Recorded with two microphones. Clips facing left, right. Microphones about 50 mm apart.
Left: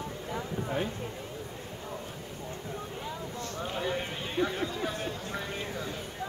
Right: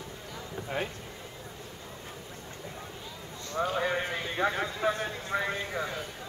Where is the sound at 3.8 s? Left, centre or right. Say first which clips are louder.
Right 3 dB; right.